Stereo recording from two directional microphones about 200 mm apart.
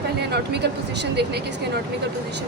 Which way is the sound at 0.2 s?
55° right (ahead or behind).